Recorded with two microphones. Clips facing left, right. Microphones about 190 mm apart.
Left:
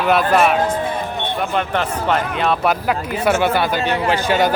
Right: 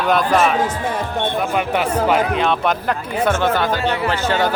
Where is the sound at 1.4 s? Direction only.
10° right (ahead or behind); by 4.5 s 15° left (ahead or behind).